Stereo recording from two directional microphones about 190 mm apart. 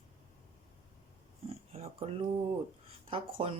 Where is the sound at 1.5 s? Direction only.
30° right (ahead or behind).